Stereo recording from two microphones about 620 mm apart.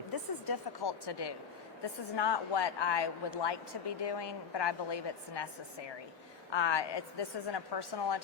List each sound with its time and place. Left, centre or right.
0.1 s a woman's voice: left
6.5 s a woman's voice: left